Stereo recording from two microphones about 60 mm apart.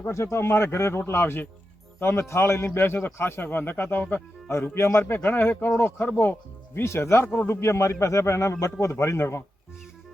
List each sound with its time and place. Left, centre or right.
0.0 s speech: left
6.7 s speech: left
7.3 s speech: left
7.5 s speech: left